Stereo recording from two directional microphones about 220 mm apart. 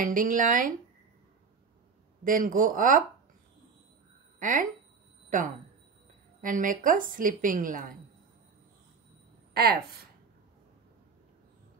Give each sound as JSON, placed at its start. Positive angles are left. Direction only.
{"t": 0.0, "sound": "a woman's voice", "side_deg": -35}
{"t": 2.2, "sound": "a woman's voice", "side_deg": -40}
{"t": 4.4, "sound": "speech", "side_deg": -35}
{"t": 6.4, "sound": "a woman's voice", "side_deg": -35}
{"t": 9.5, "sound": "speech", "side_deg": -45}